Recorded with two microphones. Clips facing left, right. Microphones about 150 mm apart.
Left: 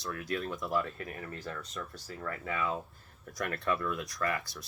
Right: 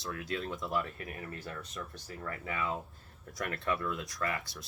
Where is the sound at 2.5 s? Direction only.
30° right (ahead or behind).